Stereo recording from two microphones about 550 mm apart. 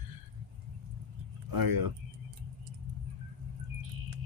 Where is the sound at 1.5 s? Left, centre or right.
Right.